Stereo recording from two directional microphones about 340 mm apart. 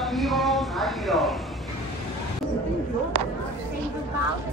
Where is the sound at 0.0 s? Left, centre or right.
Centre.